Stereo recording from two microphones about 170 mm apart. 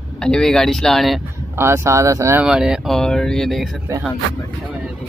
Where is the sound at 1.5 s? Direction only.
15° right (ahead or behind).